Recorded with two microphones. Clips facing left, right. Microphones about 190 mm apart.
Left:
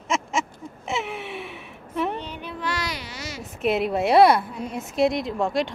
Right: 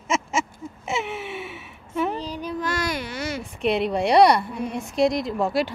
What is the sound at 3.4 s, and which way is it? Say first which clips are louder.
A woman's voice: left 1 dB; centre (ahead or behind).